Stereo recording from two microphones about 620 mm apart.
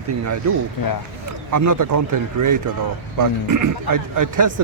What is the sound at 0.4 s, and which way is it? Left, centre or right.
A man's voice, right.